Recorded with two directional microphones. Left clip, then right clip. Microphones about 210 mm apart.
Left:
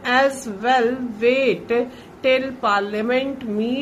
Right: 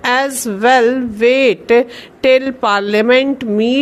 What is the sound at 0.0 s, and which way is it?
A woman's voice, 50° right (ahead or behind).